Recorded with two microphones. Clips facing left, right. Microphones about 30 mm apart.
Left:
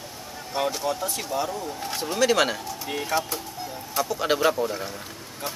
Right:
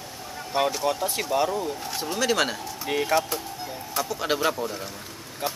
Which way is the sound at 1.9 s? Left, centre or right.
Centre.